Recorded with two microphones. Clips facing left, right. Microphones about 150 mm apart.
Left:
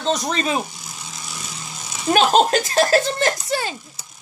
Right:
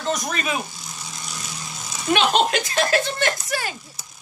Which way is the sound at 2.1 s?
40° left (ahead or behind).